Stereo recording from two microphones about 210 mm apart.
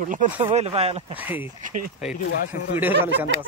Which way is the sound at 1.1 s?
10° right (ahead or behind).